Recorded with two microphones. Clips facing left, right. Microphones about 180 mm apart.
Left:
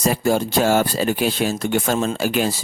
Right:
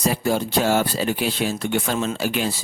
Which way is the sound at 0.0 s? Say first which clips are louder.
Left 3 dB; 45° left (ahead or behind).